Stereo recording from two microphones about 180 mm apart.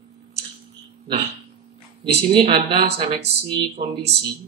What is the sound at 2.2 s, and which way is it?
Speech, 30° right (ahead or behind).